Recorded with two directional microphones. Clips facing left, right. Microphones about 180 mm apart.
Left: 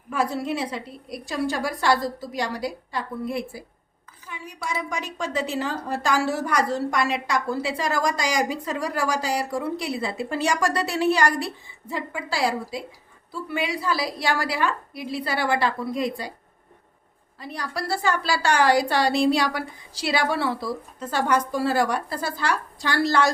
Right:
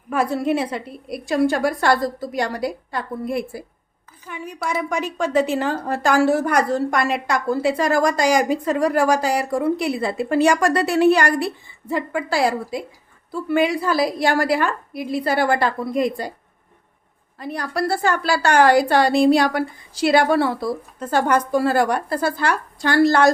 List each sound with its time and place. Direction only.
0.1 s a woman's voice: 55° right (ahead or behind)
17.4 s a woman's voice: 55° right (ahead or behind)